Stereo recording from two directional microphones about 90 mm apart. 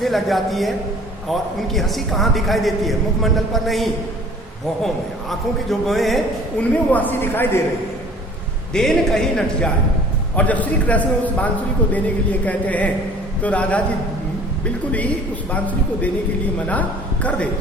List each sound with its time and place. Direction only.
0.0 s a man's voice: centre (ahead or behind)
5.8 s a man's voice: centre (ahead or behind)
6.6 s a man's voice: 20° left (ahead or behind)
8.7 s a man's voice: 5° left (ahead or behind)
10.3 s a man's voice: 15° left (ahead or behind)
15.5 s a man's voice: 15° left (ahead or behind)
17.2 s a man's voice: 15° left (ahead or behind)